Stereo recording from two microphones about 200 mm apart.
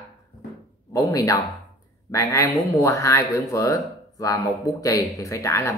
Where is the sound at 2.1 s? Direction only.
15° left (ahead or behind).